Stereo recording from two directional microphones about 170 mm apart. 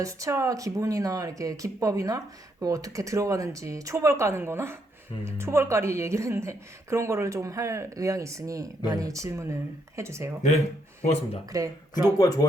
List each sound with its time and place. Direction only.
0.0 s speech: 20° right (ahead or behind)
11.0 s speech: 40° left (ahead or behind)
11.9 s speech: 20° left (ahead or behind)